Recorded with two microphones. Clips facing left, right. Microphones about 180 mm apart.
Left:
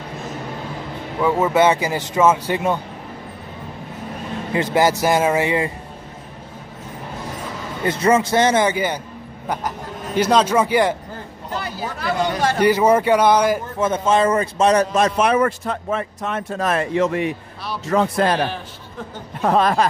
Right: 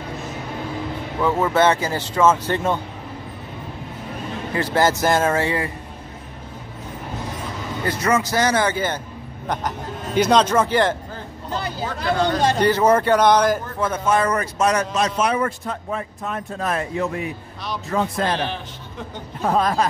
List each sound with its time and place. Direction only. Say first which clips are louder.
1.2 s speech: left 2 dB; 15° left (ahead or behind)
4.6 s speech: left 2 dB; 15° left (ahead or behind)
7.8 s speech: left 4 dB; 25° left (ahead or behind); by 11.0 s 10° left (ahead or behind)
12.1 s speech: right 1 dB; 10° left (ahead or behind)
13.7 s speech: left 3 dB; 25° left (ahead or behind)
15.0 s a man's voice: left 4 dB; 55° left (ahead or behind)
19.4 s a man's voice: left 3 dB; 75° left (ahead or behind)